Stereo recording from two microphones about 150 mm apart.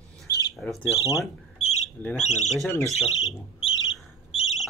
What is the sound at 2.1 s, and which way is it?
Speech, 50° left (ahead or behind).